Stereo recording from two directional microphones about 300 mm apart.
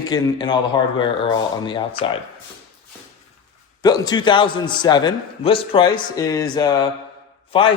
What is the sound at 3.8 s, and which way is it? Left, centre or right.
A man's voice, centre.